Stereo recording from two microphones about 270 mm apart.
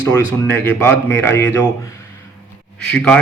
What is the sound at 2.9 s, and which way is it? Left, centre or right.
Speech, centre.